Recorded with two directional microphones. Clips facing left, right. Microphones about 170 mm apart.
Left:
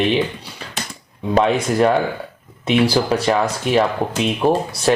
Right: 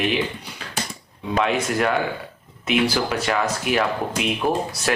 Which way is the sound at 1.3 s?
35° left (ahead or behind).